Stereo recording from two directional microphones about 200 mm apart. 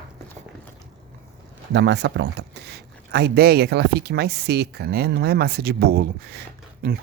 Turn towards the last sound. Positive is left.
turn(degrees=-50)  # may be behind; listen again after turning